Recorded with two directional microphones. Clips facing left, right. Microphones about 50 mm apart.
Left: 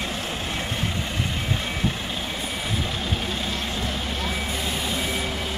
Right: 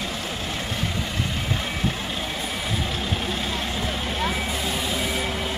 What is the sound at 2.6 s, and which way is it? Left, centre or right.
Vehicle, centre.